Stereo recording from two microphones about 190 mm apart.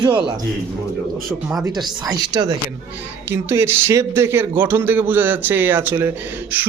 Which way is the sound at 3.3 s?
15° right (ahead or behind).